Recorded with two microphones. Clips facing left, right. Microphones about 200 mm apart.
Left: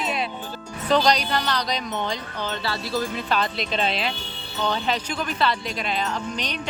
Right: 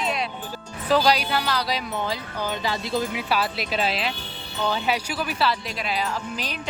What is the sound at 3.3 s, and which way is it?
Speech, 5° right (ahead or behind).